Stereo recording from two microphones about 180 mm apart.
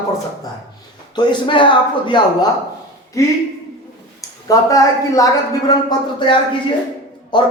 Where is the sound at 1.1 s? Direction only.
25° left (ahead or behind).